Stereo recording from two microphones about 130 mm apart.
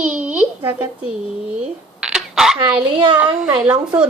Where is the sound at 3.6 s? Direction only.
10° right (ahead or behind).